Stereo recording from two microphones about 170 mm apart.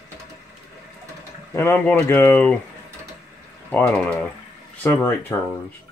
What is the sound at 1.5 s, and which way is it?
Speech, 10° left (ahead or behind).